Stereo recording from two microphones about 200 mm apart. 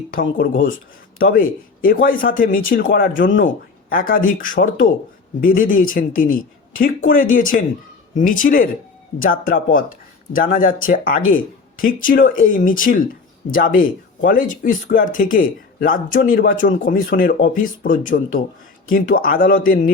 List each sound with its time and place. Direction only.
0.1 s speech: 45° left (ahead or behind)